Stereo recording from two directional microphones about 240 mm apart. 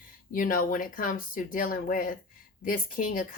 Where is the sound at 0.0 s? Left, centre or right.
Left.